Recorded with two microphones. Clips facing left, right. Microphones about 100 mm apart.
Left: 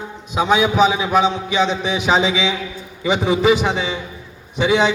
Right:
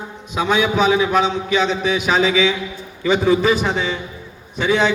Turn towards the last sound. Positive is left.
turn(degrees=15)  # may be behind; listen again after turning